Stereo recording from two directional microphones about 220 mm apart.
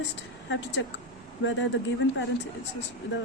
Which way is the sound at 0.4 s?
55° left (ahead or behind).